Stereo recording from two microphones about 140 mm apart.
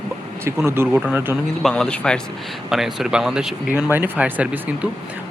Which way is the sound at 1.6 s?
5° left (ahead or behind).